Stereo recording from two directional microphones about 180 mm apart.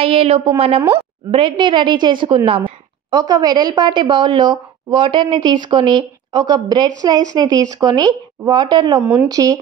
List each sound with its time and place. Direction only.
0.0 s a woman's voice: 30° right (ahead or behind)
9.0 s speech: 5° right (ahead or behind)
9.3 s a woman's voice: 20° right (ahead or behind)